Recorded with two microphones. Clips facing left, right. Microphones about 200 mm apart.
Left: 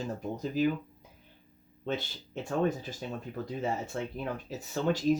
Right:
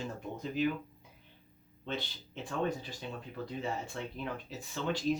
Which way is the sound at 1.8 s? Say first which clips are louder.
Left 5 dB; 45° left (ahead or behind).